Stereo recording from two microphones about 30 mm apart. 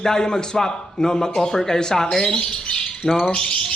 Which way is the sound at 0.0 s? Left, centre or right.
Centre.